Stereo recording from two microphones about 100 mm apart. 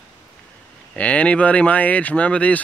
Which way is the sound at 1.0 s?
10° left (ahead or behind).